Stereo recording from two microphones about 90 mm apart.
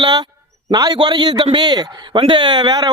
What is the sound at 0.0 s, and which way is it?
A man's voice, 50° right (ahead or behind).